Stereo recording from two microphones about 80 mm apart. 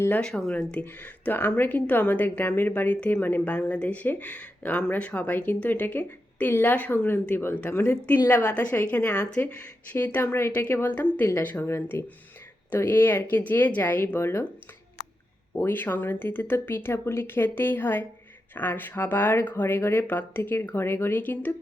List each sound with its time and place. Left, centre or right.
0.2 s a woman's voice: centre; by 14.4 s left
15.5 s a woman's voice: left